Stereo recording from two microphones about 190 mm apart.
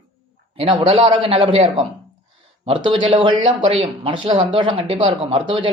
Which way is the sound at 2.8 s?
25° right (ahead or behind).